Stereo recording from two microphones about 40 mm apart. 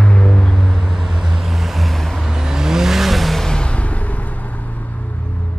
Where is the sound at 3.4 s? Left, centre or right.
Centre.